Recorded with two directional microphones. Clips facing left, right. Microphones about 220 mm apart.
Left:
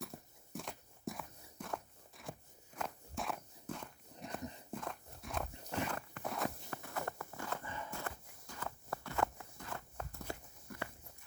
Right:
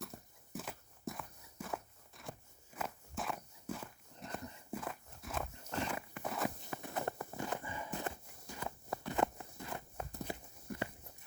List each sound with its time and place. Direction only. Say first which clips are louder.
0.0 s walk: left 1 dB; centre (ahead or behind)
6.8 s clip-clop: right 3 dB; 20° right (ahead or behind)